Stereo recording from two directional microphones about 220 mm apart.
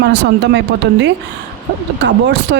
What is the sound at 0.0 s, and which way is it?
Speech, 50° right (ahead or behind).